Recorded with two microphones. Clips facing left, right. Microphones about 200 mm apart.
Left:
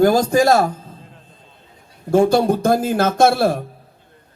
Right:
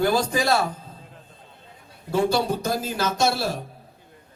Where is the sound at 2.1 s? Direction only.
50° left (ahead or behind).